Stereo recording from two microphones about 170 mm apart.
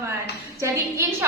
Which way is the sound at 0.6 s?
15° right (ahead or behind).